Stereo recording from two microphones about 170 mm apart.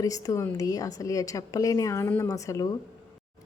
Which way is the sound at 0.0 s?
20° left (ahead or behind).